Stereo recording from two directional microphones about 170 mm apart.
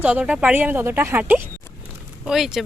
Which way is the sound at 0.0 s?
10° right (ahead or behind).